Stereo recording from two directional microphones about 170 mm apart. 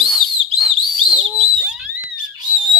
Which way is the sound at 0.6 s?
Centre (ahead or behind).